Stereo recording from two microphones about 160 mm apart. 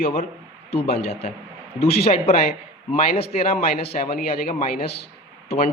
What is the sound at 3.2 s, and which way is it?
Speech, 75° left (ahead or behind).